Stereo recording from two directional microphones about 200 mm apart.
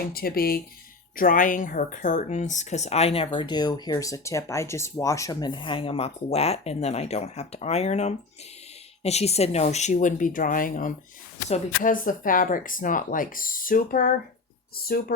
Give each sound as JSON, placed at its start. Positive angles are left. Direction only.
{"t": 0.1, "sound": "speech", "side_deg": 50}